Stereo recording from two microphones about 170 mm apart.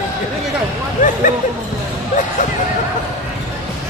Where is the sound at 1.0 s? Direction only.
50° left (ahead or behind).